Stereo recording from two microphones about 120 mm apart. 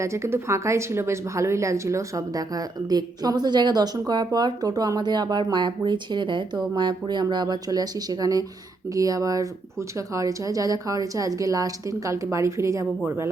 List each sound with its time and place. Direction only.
0.0 s a woman's voice: 25° right (ahead or behind)